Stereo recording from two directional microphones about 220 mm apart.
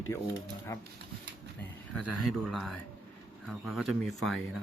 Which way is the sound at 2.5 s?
Centre (ahead or behind).